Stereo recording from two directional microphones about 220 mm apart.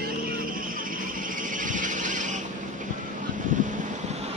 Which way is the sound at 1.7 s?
35° right (ahead or behind).